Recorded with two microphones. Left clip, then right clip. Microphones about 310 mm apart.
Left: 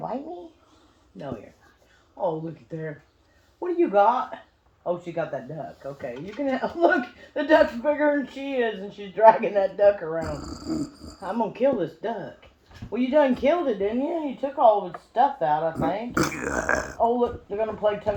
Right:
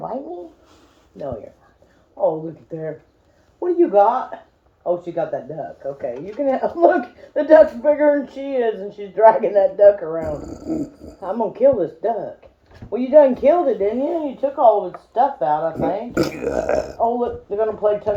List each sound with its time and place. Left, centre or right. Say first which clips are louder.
3.6 s speech: right 6 dB; left
10.2 s speech: right 6 dB; centre
11.3 s speech: right 7 dB; left
16.1 s speech: right 5 dB; centre
17.0 s speech: right 3 dB; left